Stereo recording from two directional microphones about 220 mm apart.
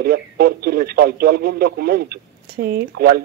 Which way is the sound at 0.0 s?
45° right (ahead or behind).